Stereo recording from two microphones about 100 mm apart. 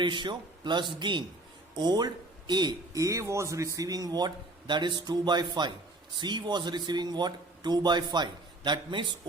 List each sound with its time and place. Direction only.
0.0 s speech: 50° right (ahead or behind)